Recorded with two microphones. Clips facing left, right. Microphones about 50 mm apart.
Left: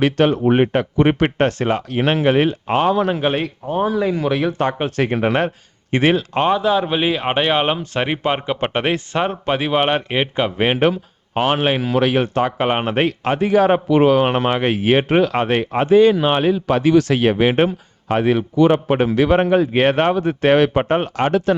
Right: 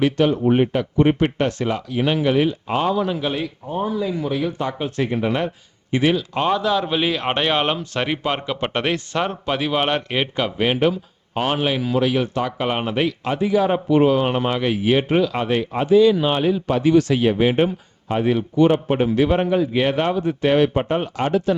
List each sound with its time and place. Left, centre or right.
0.0 s speech: left
0.9 s speech: left
1.4 s speech: left
4.9 s speech: left
5.9 s speech: left
6.4 s a man's voice: centre
10.6 s speech: left
13.8 s speech: left
14.2 s speech: left